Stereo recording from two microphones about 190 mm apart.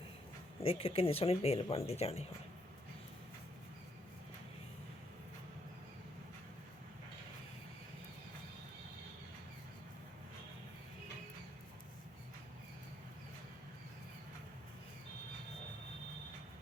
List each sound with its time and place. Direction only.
0.6 s speech: 30° left (ahead or behind)